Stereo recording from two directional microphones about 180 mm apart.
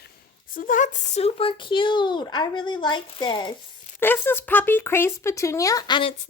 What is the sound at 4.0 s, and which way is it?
Speech, 10° left (ahead or behind).